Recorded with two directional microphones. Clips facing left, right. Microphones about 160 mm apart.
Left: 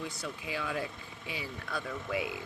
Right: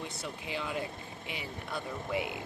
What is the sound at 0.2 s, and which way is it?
Speech, 25° right (ahead or behind).